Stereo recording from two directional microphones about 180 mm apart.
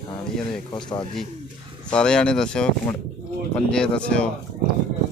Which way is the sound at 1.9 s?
5° left (ahead or behind).